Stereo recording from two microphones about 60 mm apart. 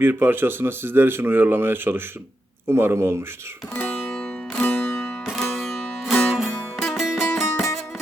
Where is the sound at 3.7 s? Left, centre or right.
Left.